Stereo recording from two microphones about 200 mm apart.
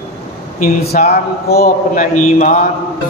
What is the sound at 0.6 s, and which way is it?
A man's voice, 50° left (ahead or behind).